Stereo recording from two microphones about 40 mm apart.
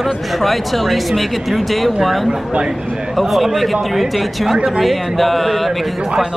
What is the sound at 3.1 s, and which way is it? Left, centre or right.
Speech, centre.